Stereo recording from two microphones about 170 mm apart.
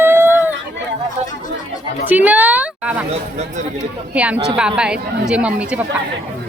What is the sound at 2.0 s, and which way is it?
A woman's voice, 10° right (ahead or behind).